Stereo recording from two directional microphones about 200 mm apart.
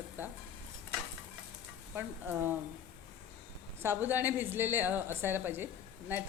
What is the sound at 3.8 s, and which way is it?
A woman's voice, 10° right (ahead or behind).